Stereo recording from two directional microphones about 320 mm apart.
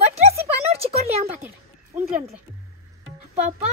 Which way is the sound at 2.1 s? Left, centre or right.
Centre.